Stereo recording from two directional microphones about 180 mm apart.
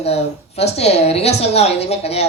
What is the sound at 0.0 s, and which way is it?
Speech, 35° left (ahead or behind).